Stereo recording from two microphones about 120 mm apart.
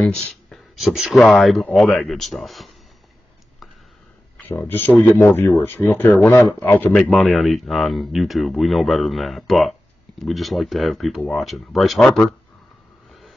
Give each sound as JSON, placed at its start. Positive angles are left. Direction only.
{"t": 0.0, "sound": "speech", "side_deg": 5}
{"t": 4.5, "sound": "speech", "side_deg": 15}